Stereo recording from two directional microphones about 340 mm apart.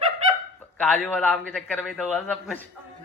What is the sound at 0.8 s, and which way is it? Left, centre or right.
A man's voice, centre.